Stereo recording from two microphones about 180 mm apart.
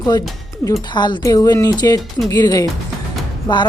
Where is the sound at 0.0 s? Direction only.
20° left (ahead or behind).